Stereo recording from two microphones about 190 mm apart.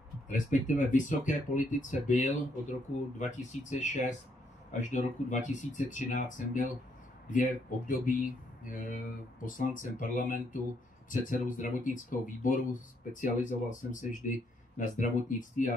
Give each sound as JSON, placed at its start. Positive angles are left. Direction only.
{"t": 0.3, "sound": "speech", "side_deg": 40}